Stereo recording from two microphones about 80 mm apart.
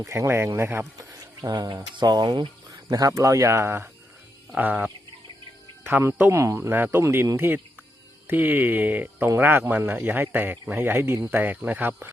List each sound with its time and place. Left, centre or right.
0.0 s speech: right
1.4 s speech: right
2.9 s speech: right
4.5 s a man's voice: centre
5.8 s speech: right
6.6 s a man's voice: right